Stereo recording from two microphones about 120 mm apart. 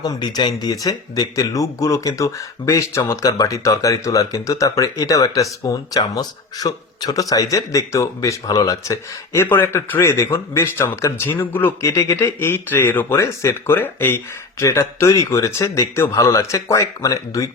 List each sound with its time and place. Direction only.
0.0 s speech: 35° left (ahead or behind)